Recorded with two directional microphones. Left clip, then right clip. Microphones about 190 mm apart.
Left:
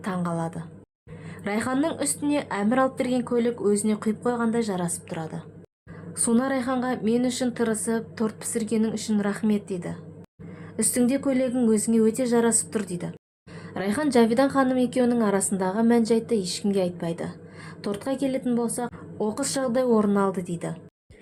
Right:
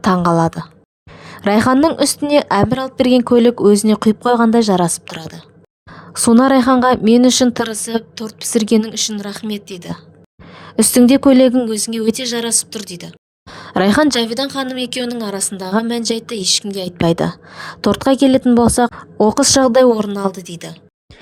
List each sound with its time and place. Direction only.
0.0 s speech: 55° right (ahead or behind)
1.2 s a sound: 50° right (ahead or behind)
2.0 s speech: 50° right (ahead or behind)